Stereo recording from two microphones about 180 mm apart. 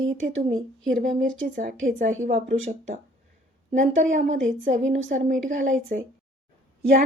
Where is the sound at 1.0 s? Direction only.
45° right (ahead or behind).